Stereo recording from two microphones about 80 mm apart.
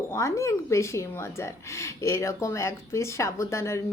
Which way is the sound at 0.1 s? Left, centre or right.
Left.